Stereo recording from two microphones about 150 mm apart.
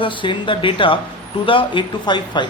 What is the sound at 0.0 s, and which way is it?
Speech, 35° left (ahead or behind).